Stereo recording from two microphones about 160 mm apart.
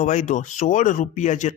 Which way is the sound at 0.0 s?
50° left (ahead or behind).